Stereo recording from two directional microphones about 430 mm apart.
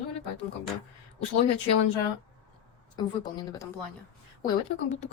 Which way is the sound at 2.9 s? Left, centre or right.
Centre.